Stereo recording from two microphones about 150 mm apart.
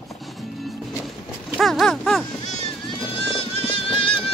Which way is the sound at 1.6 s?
Centre (ahead or behind).